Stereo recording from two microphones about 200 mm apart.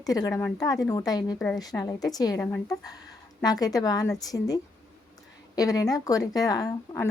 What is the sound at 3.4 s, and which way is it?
A woman's voice, 20° left (ahead or behind).